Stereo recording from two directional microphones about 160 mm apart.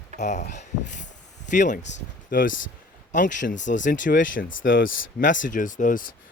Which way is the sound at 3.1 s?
50° left (ahead or behind).